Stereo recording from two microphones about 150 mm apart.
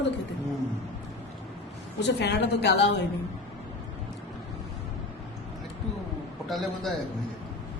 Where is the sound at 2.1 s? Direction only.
90° left.